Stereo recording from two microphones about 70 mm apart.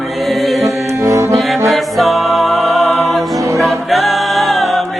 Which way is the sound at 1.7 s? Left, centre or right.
Centre.